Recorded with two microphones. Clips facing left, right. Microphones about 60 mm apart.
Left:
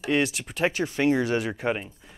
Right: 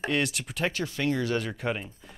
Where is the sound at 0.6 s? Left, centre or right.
Left.